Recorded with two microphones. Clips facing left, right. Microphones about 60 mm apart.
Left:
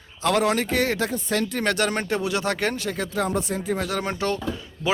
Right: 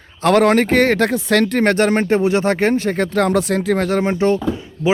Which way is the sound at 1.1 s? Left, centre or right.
Right.